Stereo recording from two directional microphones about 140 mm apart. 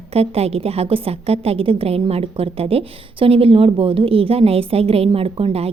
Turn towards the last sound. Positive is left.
turn(degrees=-45)  # may be behind; listen again after turning